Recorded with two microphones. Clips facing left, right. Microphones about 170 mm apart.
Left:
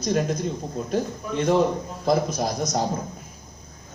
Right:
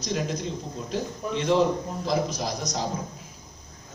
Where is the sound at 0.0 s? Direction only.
50° left (ahead or behind).